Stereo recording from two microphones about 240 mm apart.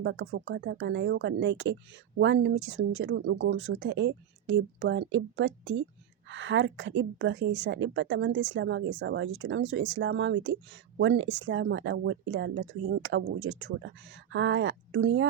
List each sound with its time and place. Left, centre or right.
0.0 s a woman's voice: right